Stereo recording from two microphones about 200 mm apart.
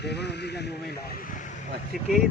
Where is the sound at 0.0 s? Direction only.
55° left (ahead or behind).